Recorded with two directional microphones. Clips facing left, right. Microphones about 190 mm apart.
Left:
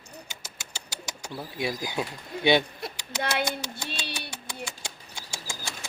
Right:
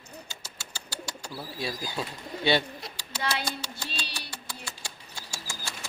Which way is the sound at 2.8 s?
55° left (ahead or behind).